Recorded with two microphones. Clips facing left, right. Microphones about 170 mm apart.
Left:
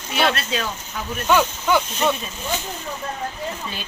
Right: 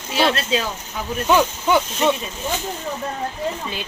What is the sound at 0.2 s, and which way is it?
Speech, 30° right (ahead or behind).